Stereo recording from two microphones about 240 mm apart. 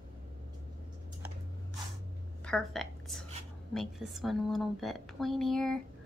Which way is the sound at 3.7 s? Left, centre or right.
Centre.